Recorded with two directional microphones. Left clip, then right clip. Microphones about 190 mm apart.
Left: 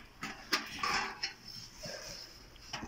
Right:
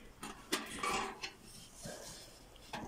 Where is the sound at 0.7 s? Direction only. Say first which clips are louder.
Left 2 dB; 20° right (ahead or behind).